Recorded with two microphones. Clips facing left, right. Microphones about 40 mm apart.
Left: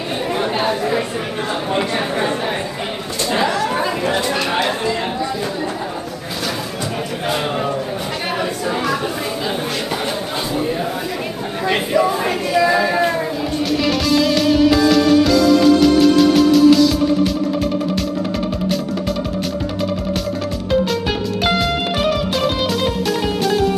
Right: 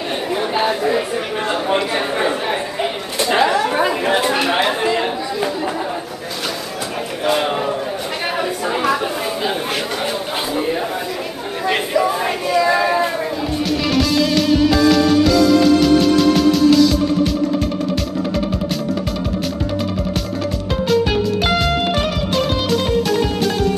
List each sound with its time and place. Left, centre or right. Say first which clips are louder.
0.3 s chatter: right 1 dB; centre
3.3 s chatter: right 3 dB; right
10.5 s a sound: right 1 dB; centre
11.6 s a sound: left 1 dB; centre
13.8 s music: even; centre
22.0 s music: left 1 dB; centre